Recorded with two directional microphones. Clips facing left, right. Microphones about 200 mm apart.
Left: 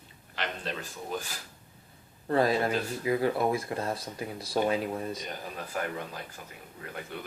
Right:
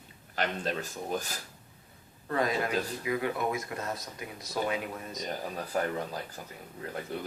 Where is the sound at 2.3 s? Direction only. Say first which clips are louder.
Left 4 dB; 30° left (ahead or behind).